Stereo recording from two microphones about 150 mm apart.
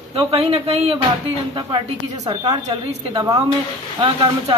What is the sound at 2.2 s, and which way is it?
A woman's voice, 25° right (ahead or behind).